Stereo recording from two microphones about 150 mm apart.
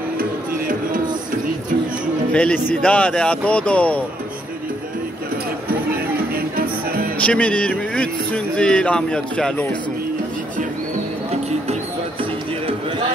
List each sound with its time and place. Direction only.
0.2 s music: 65° right (ahead or behind)
2.3 s speech: 10° left (ahead or behind)
6.3 s music: 80° right
7.2 s speech: 10° left (ahead or behind)